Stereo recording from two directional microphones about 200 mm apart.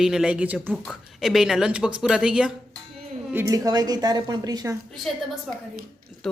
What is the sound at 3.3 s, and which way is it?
A woman's voice, 15° right (ahead or behind).